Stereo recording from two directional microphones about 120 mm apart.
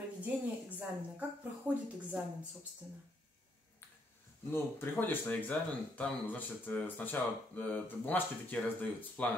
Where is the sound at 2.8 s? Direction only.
15° right (ahead or behind).